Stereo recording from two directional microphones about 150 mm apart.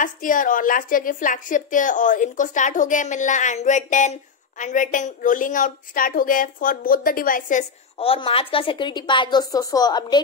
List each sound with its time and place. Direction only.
0.0 s a woman's voice: 65° left (ahead or behind)
8.0 s a woman's voice: 40° left (ahead or behind)